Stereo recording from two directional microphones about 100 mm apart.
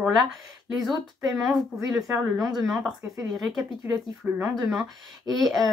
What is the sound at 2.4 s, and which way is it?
Speech, 30° right (ahead or behind).